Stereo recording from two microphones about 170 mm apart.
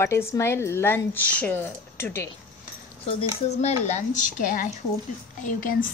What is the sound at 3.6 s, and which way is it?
Speech, 40° left (ahead or behind).